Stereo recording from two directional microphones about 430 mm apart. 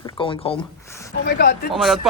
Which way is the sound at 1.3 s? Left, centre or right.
Left.